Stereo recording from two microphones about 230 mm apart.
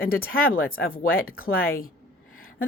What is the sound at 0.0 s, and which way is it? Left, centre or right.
Speech, left.